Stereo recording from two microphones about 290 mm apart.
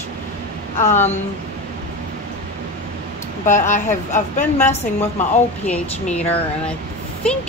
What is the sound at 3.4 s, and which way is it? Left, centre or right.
Speech, left.